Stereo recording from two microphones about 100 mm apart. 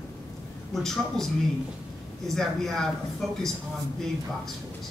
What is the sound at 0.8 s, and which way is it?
Speech, 5° left (ahead or behind).